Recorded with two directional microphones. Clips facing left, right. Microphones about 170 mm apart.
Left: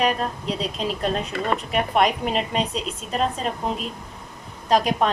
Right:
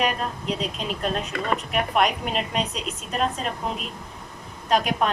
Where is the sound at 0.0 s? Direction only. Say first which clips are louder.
Left 3 dB; 35° left (ahead or behind).